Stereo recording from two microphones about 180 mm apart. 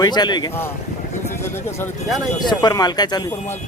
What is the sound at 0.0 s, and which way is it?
Speech, 25° left (ahead or behind).